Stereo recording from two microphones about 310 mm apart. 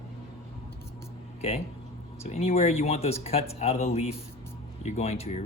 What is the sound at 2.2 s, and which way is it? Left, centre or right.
Speech, centre.